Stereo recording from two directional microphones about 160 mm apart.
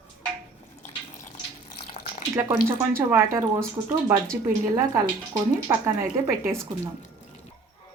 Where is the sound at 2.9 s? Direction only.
15° right (ahead or behind).